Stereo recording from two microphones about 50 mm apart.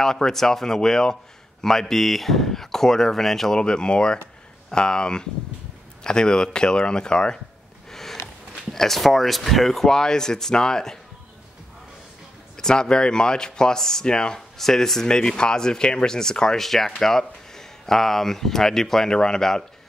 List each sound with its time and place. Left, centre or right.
0.0 s speech: centre
3.5 s speech: centre
7.9 s a sound: centre
8.7 s speech: centre
12.5 s speech: centre